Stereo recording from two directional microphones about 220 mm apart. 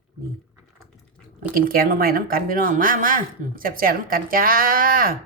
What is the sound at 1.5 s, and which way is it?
A woman's voice, 40° right (ahead or behind).